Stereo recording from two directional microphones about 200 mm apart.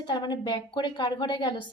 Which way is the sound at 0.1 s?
20° left (ahead or behind).